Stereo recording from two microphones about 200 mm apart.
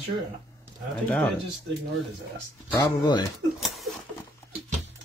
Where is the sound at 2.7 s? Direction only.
20° left (ahead or behind).